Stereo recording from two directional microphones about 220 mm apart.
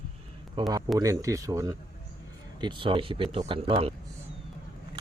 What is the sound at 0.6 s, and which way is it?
Speech, 20° right (ahead or behind).